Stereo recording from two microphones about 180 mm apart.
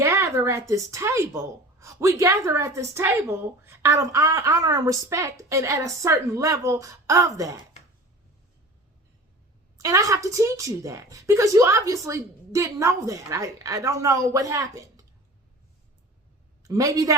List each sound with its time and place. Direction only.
0.0 s a sound: 15° right (ahead or behind)
0.7 s a woman's voice: 15° right (ahead or behind)
9.7 s a woman's voice: 20° right (ahead or behind)
16.6 s a woman's voice: 20° right (ahead or behind)